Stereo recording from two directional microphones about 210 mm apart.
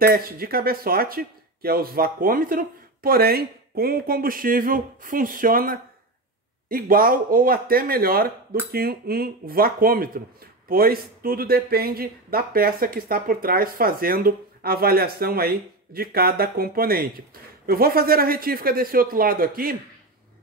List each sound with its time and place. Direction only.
0.0 s speech: 45° right (ahead or behind)